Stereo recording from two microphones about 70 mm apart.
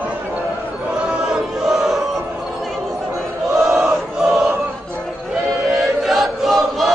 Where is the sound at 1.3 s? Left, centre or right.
Centre.